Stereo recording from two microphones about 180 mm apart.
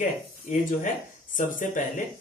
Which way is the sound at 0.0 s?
45° left (ahead or behind).